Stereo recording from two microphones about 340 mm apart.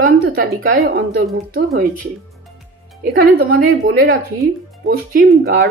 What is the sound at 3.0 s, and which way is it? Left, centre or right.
Speech, right.